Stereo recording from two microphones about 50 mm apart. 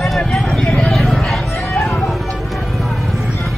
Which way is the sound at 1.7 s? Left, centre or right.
Left.